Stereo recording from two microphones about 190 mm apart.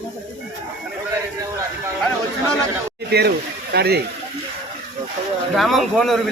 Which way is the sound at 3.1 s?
60° right (ahead or behind).